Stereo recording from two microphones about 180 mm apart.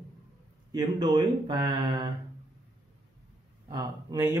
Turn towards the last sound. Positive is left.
turn(degrees=-20)  # may be behind; listen again after turning